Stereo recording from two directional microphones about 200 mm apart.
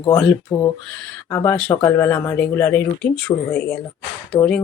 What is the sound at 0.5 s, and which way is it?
Speech, 20° left (ahead or behind).